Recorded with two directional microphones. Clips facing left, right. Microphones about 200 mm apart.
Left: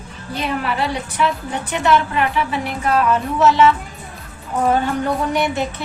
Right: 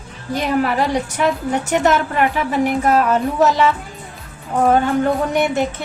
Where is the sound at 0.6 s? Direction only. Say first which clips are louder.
Right 4 dB; 40° right (ahead or behind).